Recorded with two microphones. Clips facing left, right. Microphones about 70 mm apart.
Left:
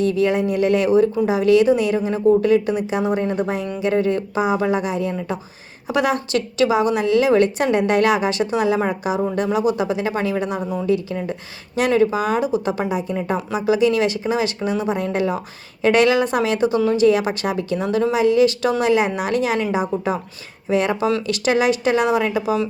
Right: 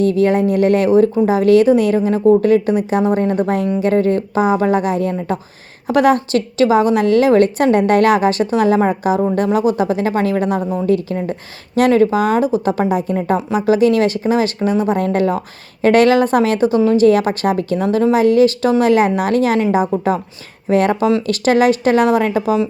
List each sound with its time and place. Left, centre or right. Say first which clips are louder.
0.0 s a woman's voice: right 4 dB; right
10.6 s speech: right 4 dB; centre
10.8 s a woman's voice: right 3 dB; right